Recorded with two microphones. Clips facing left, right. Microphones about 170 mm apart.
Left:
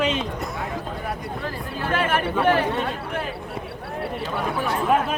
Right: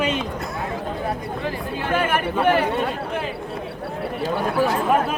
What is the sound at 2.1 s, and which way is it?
Speech, 15° right (ahead or behind).